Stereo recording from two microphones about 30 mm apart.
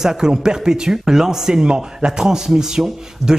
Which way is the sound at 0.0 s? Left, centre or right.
Right.